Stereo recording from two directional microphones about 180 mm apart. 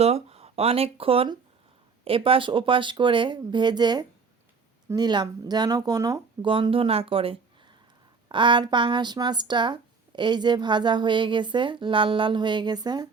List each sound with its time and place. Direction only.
0.0 s speech: 35° right (ahead or behind)